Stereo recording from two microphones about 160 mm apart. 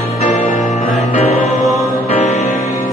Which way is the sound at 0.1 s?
45° left (ahead or behind).